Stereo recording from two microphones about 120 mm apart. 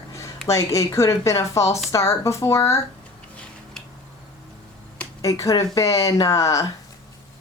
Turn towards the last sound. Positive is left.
turn(degrees=25)  # may be behind; listen again after turning